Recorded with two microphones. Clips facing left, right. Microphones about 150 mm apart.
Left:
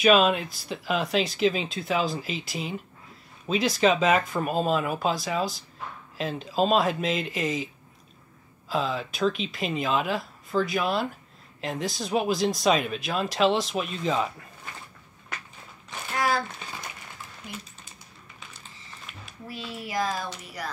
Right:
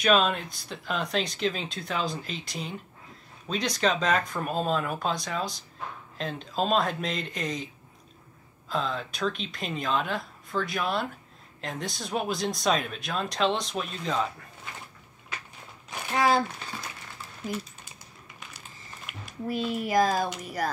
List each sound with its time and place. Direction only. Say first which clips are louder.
0.0 s speech: left 4 dB; 5° left (ahead or behind)
15.9 s a sound: right 3 dB; 20° right (ahead or behind)
19.2 s speech: right 9 dB; 45° right (ahead or behind)